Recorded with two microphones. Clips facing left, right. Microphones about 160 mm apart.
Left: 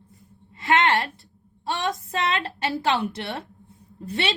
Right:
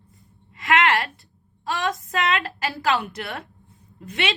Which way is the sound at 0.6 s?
30° left (ahead or behind).